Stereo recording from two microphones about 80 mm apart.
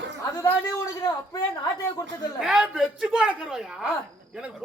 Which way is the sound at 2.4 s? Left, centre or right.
Centre.